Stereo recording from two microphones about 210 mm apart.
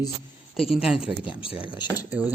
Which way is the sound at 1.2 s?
25° left (ahead or behind).